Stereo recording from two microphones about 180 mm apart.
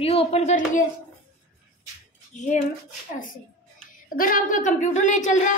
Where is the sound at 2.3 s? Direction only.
40° left (ahead or behind).